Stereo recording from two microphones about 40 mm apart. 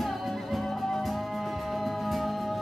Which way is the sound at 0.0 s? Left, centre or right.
Centre.